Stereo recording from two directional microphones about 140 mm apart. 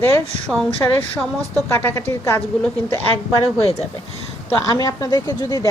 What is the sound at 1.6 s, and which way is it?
Speech, 15° left (ahead or behind).